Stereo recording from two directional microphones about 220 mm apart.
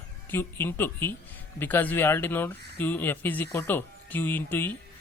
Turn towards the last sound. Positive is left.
turn(degrees=10)  # may be behind; listen again after turning